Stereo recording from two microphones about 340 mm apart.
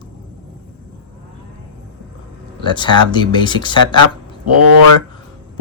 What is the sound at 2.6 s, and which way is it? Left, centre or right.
Speech, centre.